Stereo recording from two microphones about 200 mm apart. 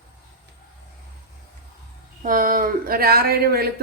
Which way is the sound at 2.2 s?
45° right (ahead or behind).